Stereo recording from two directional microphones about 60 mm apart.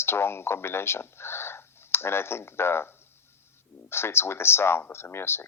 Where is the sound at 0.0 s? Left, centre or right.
Left.